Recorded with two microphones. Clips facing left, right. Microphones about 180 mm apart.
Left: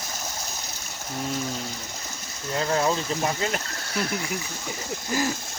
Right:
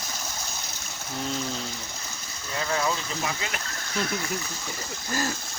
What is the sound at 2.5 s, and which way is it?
Speech, 35° left (ahead or behind).